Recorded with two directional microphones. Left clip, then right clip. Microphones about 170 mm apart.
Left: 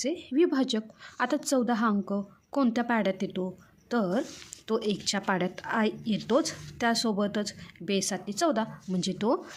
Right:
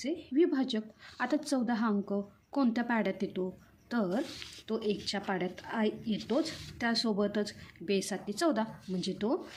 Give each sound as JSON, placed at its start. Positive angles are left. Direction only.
{"t": 0.0, "sound": "a woman's voice", "side_deg": 45}
{"t": 4.7, "sound": "a woman's voice", "side_deg": 45}